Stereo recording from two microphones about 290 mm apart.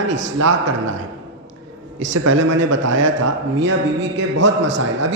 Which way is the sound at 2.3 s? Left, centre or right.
Right.